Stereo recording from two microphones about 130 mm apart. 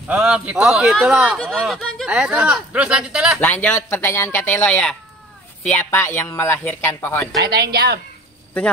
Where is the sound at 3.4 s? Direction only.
15° left (ahead or behind).